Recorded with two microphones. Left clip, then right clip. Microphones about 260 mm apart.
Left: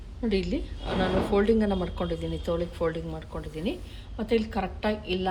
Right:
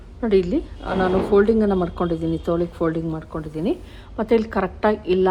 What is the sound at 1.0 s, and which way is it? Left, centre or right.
Speech, right.